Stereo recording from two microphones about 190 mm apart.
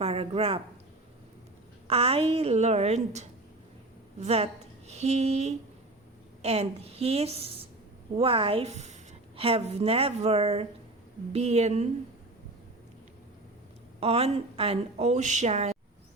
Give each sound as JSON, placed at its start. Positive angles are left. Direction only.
{"t": 0.0, "sound": "a woman's voice", "side_deg": -30}
{"t": 1.9, "sound": "a woman's voice", "side_deg": -30}
{"t": 14.0, "sound": "a woman's voice", "side_deg": -35}